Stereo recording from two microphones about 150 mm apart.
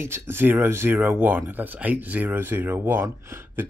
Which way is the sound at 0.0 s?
15° right (ahead or behind).